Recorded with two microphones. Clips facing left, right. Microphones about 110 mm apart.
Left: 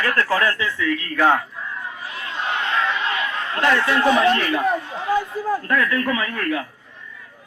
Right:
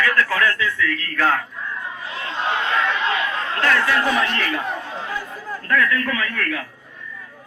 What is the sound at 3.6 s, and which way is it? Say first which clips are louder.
A man's voice: left 2 dB; 25° left (ahead or behind).